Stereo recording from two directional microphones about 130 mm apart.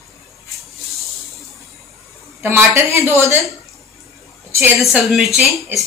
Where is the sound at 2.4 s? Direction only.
20° right (ahead or behind).